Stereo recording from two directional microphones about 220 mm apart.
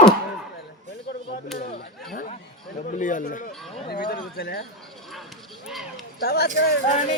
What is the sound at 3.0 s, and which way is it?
Speech, 35° left (ahead or behind).